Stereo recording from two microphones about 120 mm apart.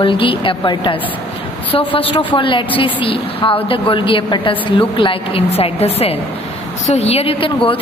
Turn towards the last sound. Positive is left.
turn(degrees=50)  # may be behind; listen again after turning